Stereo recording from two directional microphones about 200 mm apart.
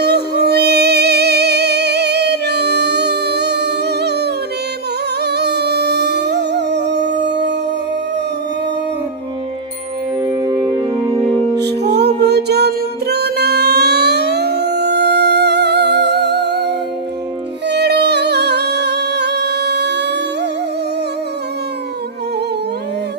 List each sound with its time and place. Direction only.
0.0 s music: 55° right (ahead or behind)
10.2 s music: 20° right (ahead or behind)
11.3 s music: 10° left (ahead or behind)
11.5 s music: 55° right (ahead or behind)